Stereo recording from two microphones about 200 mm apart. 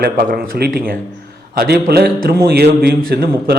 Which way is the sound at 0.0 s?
45° right (ahead or behind).